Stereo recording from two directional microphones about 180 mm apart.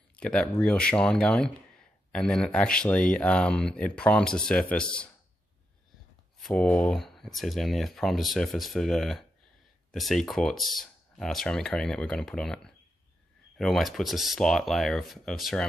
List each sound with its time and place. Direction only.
0.1 s speech: 5° left (ahead or behind)
6.4 s speech: 5° left (ahead or behind)